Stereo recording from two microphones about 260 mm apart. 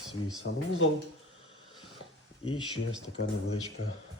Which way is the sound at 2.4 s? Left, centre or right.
Centre.